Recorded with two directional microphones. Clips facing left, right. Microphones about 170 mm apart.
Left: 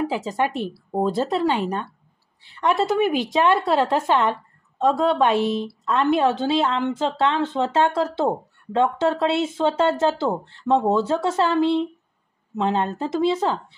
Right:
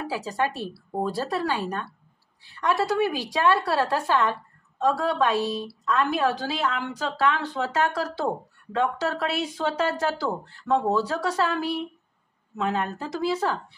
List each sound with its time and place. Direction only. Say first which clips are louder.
0.0 s a woman's voice: left 4 dB; 20° left (ahead or behind)